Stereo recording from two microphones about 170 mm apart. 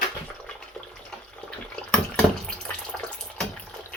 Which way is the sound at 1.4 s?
5° left (ahead or behind).